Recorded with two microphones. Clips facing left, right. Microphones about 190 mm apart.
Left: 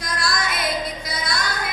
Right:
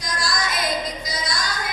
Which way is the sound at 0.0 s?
60° left (ahead or behind).